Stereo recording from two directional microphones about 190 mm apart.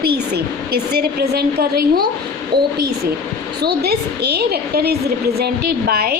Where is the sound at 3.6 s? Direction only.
55° right (ahead or behind).